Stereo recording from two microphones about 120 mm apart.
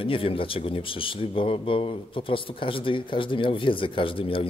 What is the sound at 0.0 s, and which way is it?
Speech, 50° left (ahead or behind).